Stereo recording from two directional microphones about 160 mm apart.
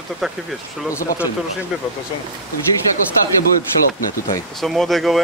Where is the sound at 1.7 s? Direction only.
5° right (ahead or behind).